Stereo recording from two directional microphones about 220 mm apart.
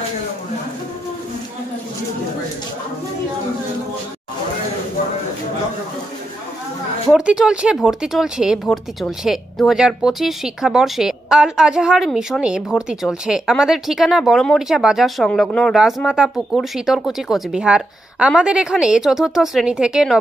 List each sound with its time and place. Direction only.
7.1 s speech: 5° right (ahead or behind)